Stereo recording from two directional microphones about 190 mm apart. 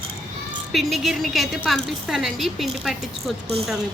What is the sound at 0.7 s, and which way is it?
A woman's voice, centre (ahead or behind).